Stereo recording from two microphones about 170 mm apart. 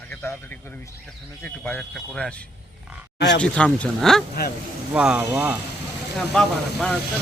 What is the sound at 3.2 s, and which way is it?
Speech, 90° left.